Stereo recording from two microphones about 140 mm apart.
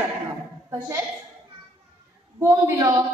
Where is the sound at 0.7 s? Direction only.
20° right (ahead or behind).